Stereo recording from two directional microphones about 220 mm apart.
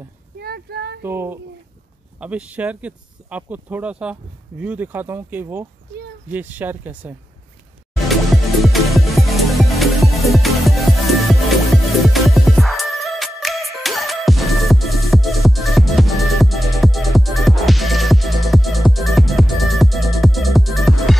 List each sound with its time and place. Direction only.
0.4 s a sound: 45° right (ahead or behind)
1.0 s speech: 10° right (ahead or behind)
8.6 s music: centre (ahead or behind)